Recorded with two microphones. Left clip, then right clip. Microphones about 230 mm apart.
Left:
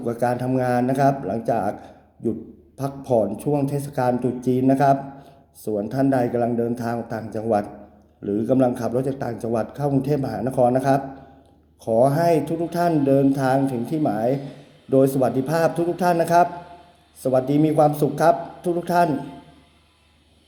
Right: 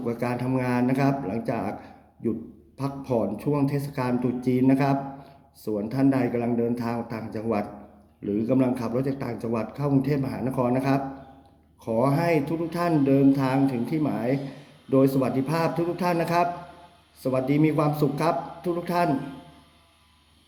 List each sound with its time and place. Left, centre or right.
0.0 s a man's voice: centre
2.7 s a man's voice: centre